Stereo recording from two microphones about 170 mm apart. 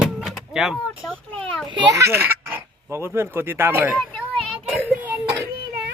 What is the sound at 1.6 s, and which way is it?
Speech, 25° right (ahead or behind).